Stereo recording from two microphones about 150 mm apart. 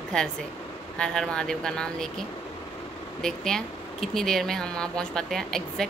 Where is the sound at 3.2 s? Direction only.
5° left (ahead or behind).